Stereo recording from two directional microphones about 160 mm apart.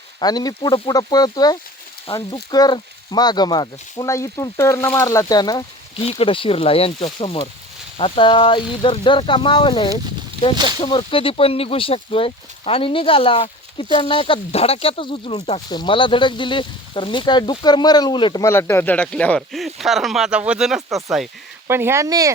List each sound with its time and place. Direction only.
0.2 s speech: 25° left (ahead or behind)
6.0 s speech: 35° left (ahead or behind)
15.7 s speech: 30° left (ahead or behind)
18.4 s speech: 15° left (ahead or behind); by 21.2 s centre (ahead or behind)
21.7 s speech: 15° right (ahead or behind)